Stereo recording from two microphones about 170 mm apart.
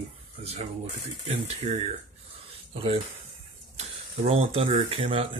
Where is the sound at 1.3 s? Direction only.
40° right (ahead or behind).